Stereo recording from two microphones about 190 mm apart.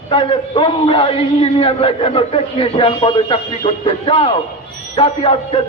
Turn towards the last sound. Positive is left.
turn(degrees=30)  # may be behind; listen again after turning